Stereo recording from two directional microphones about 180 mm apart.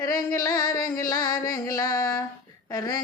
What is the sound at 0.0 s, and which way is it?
Music, 20° left (ahead or behind).